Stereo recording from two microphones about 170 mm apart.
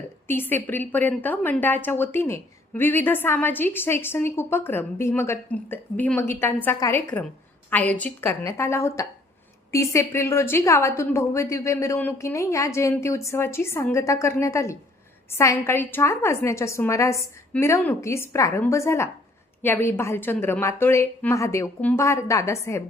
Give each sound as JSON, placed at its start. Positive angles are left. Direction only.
{"t": 0.3, "sound": "a woman's voice", "side_deg": 10}